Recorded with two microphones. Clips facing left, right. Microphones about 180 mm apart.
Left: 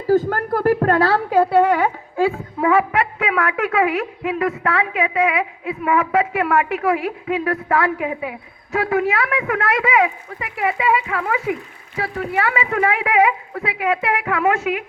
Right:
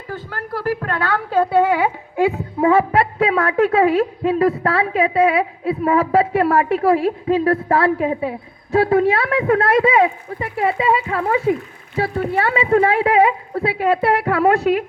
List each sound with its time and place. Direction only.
0.1 s a sound: 45° left (ahead or behind)
1.3 s a woman's voice: 5° left (ahead or behind)
2.1 s a woman's voice: 20° right (ahead or behind); by 14.8 s 35° right (ahead or behind)